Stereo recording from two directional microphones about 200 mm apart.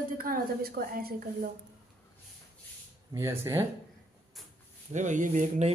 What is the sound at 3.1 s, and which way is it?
Speech, 15° right (ahead or behind).